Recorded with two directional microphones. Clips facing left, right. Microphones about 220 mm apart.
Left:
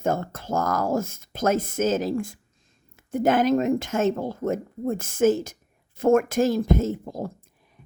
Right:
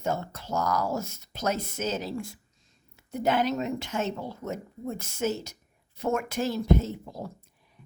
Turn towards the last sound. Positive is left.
turn(degrees=45)  # may be behind; listen again after turning